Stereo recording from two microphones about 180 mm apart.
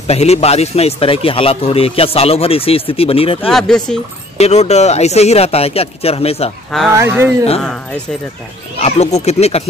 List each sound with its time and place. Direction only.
0.0 s a man's voice: 35° left (ahead or behind)
3.3 s speech: 5° left (ahead or behind)
4.4 s a man's voice: 35° left (ahead or behind)
6.9 s speech: 15° right (ahead or behind)
8.7 s a man's voice: 35° left (ahead or behind)